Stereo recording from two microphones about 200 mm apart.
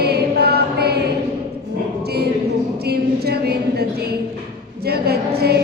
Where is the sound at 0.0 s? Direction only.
55° right (ahead or behind).